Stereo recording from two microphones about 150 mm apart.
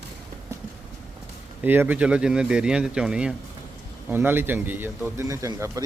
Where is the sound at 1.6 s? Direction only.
10° right (ahead or behind).